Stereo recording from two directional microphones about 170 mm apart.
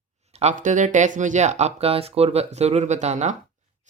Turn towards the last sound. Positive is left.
turn(degrees=-40)  # may be behind; listen again after turning